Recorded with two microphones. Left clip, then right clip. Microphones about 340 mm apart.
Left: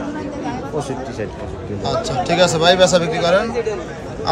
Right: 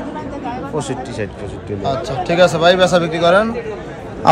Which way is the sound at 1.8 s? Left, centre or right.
Centre.